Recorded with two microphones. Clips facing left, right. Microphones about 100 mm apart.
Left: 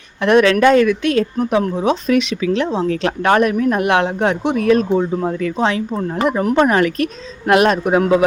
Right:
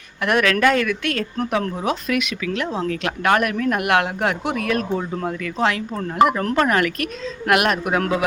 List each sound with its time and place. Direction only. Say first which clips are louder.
0.2 s speech: left 6 dB; 25° left (ahead or behind)
4.9 s speech: left 7 dB; 15° left (ahead or behind)
5.3 s speech: left 7 dB; 30° left (ahead or behind)
5.5 s speech: left 3 dB; 20° left (ahead or behind)